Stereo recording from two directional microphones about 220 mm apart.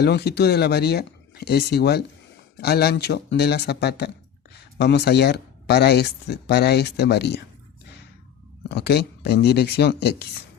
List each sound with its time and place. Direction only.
0.0 s speech: 50° left (ahead or behind)
8.7 s speech: 45° left (ahead or behind)